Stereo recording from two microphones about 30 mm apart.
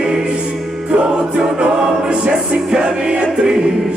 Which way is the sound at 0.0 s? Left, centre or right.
Right.